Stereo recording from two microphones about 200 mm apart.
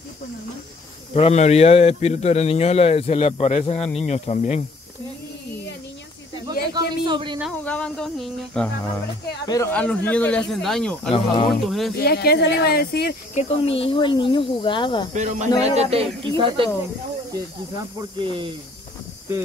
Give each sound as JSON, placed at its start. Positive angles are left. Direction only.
{"t": 1.1, "sound": "speech", "side_deg": 30}
{"t": 6.7, "sound": "a man's voice", "side_deg": -25}
{"t": 7.6, "sound": "speech", "side_deg": 5}
{"t": 11.1, "sound": "speech", "side_deg": 30}
{"t": 11.6, "sound": "speech", "side_deg": 0}
{"t": 12.0, "sound": "speech", "side_deg": 50}
{"t": 13.3, "sound": "speech", "side_deg": 35}
{"t": 15.1, "sound": "speech", "side_deg": -35}
{"t": 18.2, "sound": "speech", "side_deg": -25}